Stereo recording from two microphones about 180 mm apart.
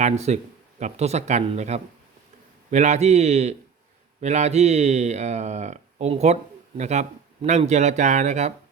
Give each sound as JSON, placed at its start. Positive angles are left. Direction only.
{"t": 0.0, "sound": "speech", "side_deg": -40}